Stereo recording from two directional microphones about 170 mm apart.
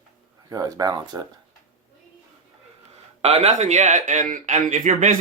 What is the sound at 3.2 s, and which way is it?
Speech, 35° right (ahead or behind).